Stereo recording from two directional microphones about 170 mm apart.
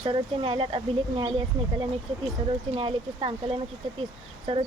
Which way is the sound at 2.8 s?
35° right (ahead or behind).